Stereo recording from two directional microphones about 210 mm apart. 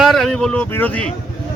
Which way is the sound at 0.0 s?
Centre (ahead or behind).